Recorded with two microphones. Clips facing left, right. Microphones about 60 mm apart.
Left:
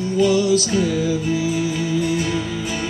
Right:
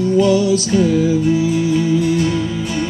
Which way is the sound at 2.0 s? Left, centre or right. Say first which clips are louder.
Right 5 dB; centre.